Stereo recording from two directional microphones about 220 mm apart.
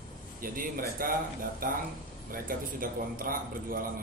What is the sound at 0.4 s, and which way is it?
Speech, 40° right (ahead or behind).